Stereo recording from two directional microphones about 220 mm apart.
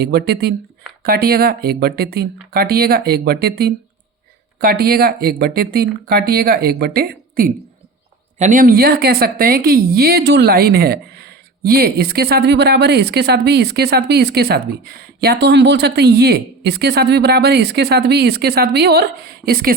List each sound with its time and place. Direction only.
0.0 s a woman's voice: 45° right (ahead or behind)